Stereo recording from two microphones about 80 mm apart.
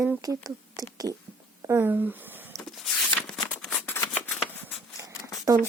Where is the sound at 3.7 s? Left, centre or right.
Left.